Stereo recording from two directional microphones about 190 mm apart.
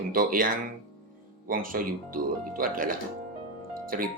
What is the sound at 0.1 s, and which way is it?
Speech, 45° right (ahead or behind).